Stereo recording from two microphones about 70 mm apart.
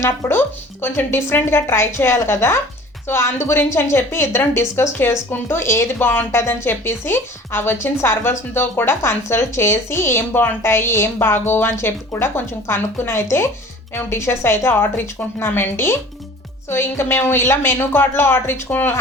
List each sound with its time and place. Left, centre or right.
0.3 s speech: left